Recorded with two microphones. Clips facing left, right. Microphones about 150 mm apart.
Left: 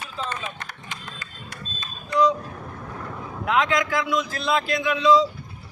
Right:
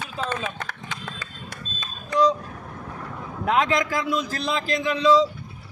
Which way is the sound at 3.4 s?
40° right (ahead or behind).